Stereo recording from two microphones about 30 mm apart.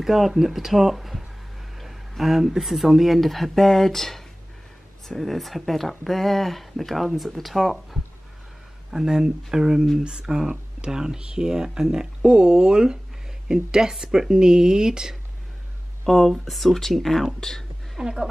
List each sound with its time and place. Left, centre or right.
0.0 s speech: centre
1.8 s a sound: centre
2.6 s speech: centre
8.9 s speech: centre
16.1 s speech: centre
17.4 s speech: centre
17.9 s speech: centre